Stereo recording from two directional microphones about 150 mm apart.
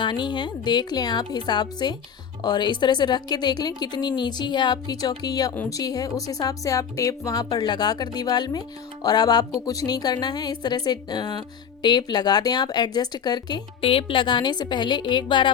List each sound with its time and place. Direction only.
0.0 s a woman's voice: 30° left (ahead or behind)